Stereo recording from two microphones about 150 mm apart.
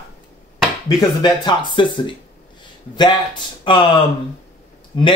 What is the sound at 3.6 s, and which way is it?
Speech, 30° left (ahead or behind).